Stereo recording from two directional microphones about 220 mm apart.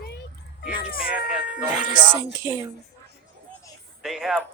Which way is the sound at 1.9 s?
20° right (ahead or behind).